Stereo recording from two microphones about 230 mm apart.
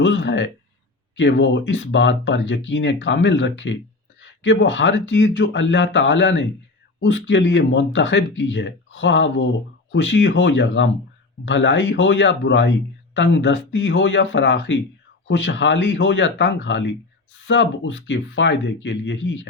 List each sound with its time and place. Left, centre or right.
0.0 s speech: left